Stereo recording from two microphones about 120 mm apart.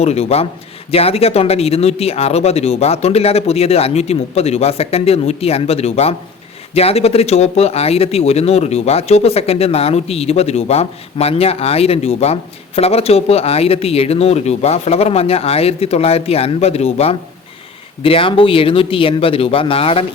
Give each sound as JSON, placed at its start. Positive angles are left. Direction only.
{"t": 0.0, "sound": "speech", "side_deg": 60}
{"t": 18.0, "sound": "speech", "side_deg": 50}